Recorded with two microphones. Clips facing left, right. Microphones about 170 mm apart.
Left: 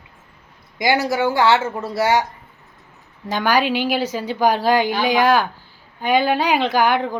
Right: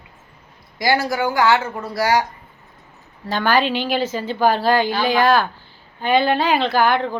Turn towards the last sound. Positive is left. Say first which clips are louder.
# even
turn(degrees=15)  # may be behind; listen again after turning